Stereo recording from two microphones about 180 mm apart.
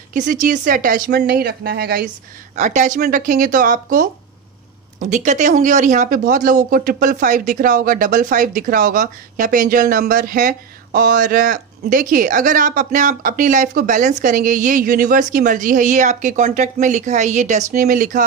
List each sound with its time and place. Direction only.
0.1 s speech: 45° right (ahead or behind)
2.5 s speech: 45° right (ahead or behind)